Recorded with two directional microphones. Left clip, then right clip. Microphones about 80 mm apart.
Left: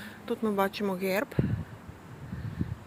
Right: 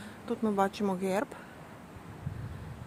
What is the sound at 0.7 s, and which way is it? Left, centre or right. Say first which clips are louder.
Speech: left 2 dB; right.